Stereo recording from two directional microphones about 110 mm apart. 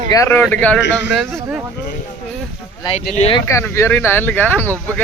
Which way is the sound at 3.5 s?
25° left (ahead or behind).